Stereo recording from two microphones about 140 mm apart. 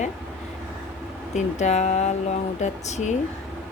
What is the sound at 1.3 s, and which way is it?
Speech, 55° left (ahead or behind).